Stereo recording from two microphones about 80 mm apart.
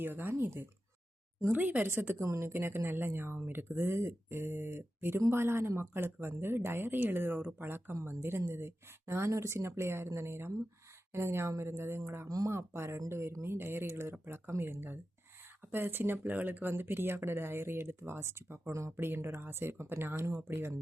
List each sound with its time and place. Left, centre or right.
0.0 s a woman's voice: right
12.3 s speech: right
12.5 s a woman's voice: right